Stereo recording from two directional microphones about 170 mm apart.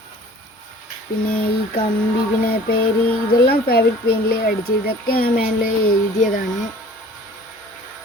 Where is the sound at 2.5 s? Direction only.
60° left (ahead or behind).